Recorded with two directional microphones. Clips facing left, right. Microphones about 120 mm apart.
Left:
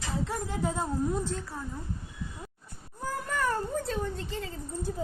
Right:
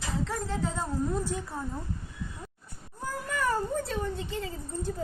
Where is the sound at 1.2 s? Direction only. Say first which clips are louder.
Right 1 dB; 15° right (ahead or behind).